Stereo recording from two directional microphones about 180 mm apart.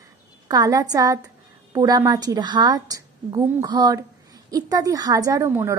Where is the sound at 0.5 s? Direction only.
20° right (ahead or behind).